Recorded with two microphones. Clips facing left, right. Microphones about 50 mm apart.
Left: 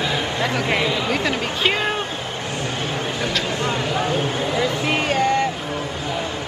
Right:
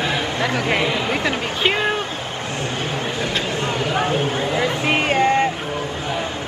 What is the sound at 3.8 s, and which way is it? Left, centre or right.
Speech, right.